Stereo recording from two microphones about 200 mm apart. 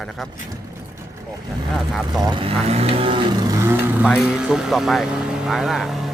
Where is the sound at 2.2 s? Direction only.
25° right (ahead or behind).